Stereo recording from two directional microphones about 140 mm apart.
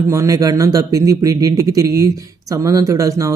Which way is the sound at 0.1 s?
20° right (ahead or behind).